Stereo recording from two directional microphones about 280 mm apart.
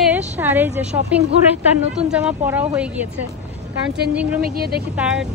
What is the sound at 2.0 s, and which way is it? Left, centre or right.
Speech, centre.